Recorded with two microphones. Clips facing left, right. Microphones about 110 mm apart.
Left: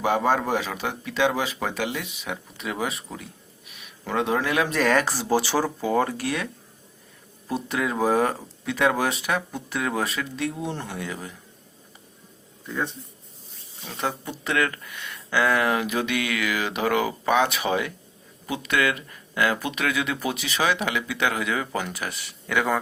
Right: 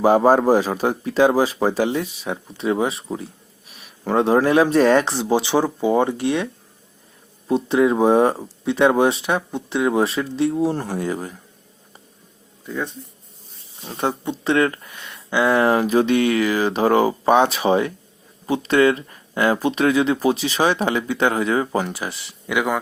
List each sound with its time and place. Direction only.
0.0 s speech: 35° right (ahead or behind)
13.8 s speech: 30° right (ahead or behind)
22.4 s speech: 15° right (ahead or behind)